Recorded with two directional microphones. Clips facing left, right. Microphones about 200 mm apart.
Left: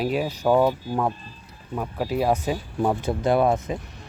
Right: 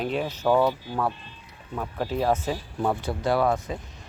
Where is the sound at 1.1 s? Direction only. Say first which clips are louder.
Left 3 dB; 40° left (ahead or behind).